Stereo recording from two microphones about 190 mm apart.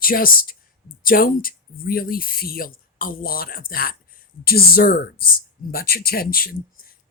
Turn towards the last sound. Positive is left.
turn(degrees=50)  # may be behind; listen again after turning